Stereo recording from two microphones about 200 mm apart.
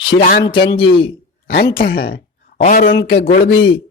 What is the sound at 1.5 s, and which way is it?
Speech, 50° left (ahead or behind).